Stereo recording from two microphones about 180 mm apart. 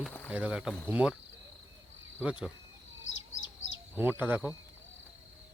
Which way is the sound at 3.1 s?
90° left.